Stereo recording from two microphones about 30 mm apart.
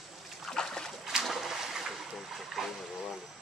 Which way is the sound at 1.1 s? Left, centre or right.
Centre.